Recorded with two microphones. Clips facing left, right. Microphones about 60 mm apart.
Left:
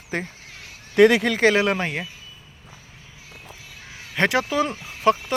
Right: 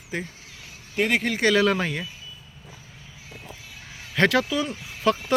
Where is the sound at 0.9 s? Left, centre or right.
Left.